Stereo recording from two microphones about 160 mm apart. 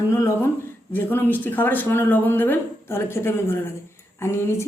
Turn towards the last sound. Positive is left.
turn(degrees=15)  # may be behind; listen again after turning